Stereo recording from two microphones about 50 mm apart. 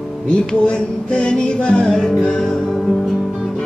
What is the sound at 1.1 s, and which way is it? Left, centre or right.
Music, centre.